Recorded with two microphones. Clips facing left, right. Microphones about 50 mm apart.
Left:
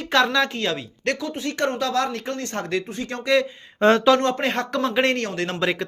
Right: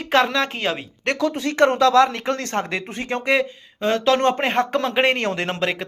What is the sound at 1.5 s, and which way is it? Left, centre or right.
Speech, right.